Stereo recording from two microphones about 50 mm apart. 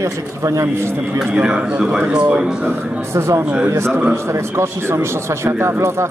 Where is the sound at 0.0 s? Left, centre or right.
Right.